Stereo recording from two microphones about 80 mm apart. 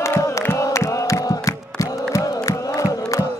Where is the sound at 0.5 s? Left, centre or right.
Left.